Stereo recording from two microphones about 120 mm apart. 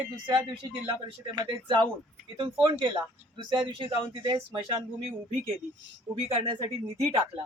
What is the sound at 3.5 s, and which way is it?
Speech, 45° right (ahead or behind).